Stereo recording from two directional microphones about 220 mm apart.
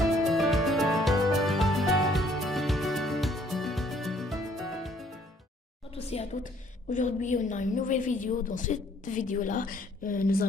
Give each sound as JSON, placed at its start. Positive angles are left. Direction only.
{"t": 0.0, "sound": "music", "side_deg": 0}
{"t": 5.9, "sound": "a woman's voice", "side_deg": 30}